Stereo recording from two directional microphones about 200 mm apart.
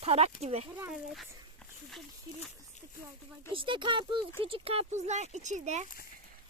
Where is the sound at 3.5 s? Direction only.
25° right (ahead or behind).